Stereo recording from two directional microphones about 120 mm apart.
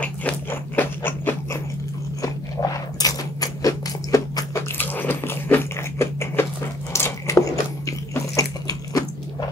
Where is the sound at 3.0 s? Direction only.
30° left (ahead or behind).